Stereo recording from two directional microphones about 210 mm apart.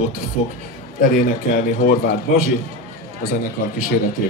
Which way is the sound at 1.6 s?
45° left (ahead or behind).